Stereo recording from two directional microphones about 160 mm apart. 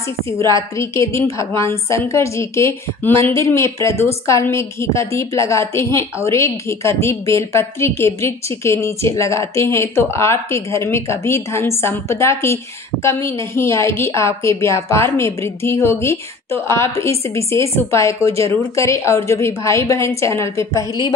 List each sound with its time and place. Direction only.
0.7 s a woman's voice: 20° left (ahead or behind)